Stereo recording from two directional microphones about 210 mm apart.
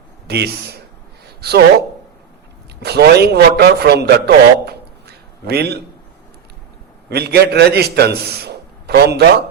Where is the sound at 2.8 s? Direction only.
50° right (ahead or behind).